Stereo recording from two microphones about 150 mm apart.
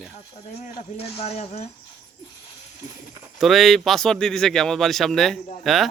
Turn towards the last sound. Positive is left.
turn(degrees=0)  # may be behind; listen again after turning